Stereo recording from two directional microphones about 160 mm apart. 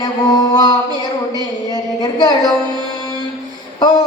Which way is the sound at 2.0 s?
25° left (ahead or behind).